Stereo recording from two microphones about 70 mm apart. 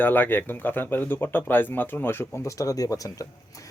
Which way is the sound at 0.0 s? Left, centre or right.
Left.